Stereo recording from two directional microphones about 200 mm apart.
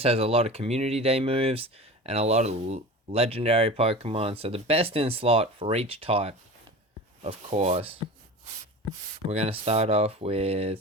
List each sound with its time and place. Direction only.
0.0 s speech: 30° right (ahead or behind)
9.3 s speech: 30° right (ahead or behind)